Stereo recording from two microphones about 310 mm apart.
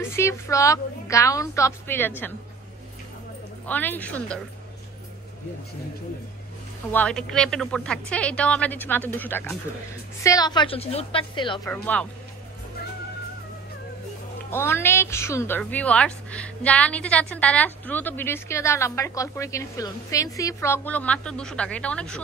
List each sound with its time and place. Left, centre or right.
0.0 s a woman's voice: centre
3.6 s a woman's voice: centre
6.9 s a woman's voice: centre
11.7 s a woman's voice: centre
14.5 s a woman's voice: centre